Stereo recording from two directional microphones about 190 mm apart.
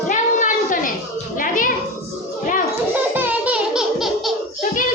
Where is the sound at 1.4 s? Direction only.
45° left (ahead or behind).